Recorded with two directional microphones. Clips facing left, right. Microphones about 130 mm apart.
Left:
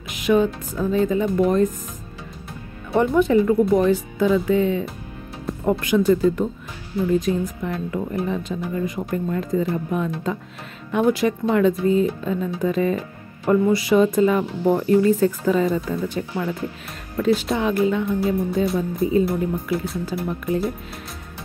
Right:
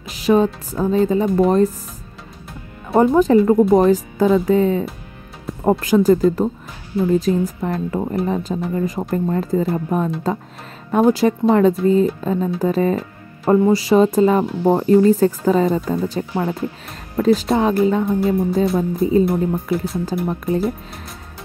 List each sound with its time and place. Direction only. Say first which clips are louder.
0.0 s speech: right 3 dB; 35° right (ahead or behind)
2.9 s speech: right 4 dB; 35° right (ahead or behind)
20.1 s speech: right 3 dB; 35° right (ahead or behind)